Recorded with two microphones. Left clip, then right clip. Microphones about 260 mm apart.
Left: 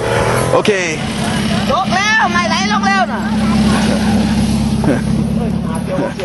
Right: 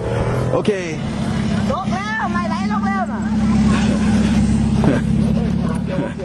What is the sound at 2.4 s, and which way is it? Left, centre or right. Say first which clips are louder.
Vehicle: left 8 dB; centre.